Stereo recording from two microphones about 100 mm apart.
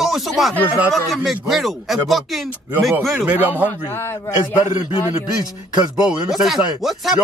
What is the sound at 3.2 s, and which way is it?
Speech, 15° right (ahead or behind).